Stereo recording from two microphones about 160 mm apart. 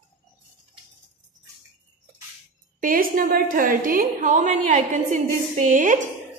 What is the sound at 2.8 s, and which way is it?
A woman's voice, 60° right (ahead or behind).